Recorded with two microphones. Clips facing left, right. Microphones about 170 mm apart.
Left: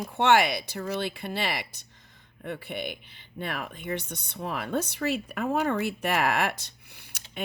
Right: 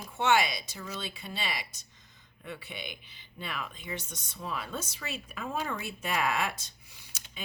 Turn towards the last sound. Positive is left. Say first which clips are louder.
# left 9 dB
turn(degrees=60)  # may be behind; listen again after turning